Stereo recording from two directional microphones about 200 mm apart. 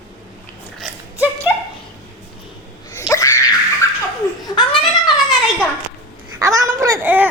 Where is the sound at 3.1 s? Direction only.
15° left (ahead or behind).